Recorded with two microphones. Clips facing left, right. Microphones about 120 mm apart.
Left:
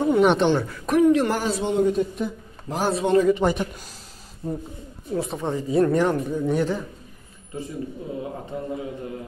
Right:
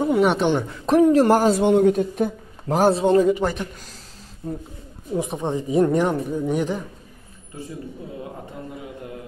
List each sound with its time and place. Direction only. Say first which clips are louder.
0.0 s a sound: left 1 dB; 5° right (ahead or behind)
0.5 s speech: right 2 dB; 20° right (ahead or behind); by 2.9 s 55° right (ahead or behind)
2.9 s speech: even; 30° right (ahead or behind)
4.4 s speech: left 1 dB; centre (ahead or behind)
5.1 s speech: right 2 dB; 15° right (ahead or behind)